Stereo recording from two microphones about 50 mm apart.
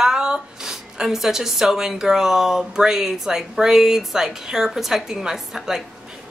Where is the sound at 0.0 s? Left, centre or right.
Centre.